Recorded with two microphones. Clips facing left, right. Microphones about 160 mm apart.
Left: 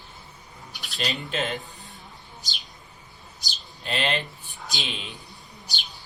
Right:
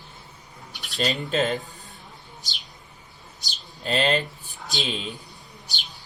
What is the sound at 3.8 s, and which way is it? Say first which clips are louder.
Speech: right 5 dB; 40° right (ahead or behind).